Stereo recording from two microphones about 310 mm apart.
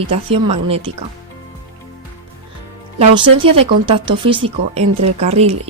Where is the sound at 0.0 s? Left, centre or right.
Centre.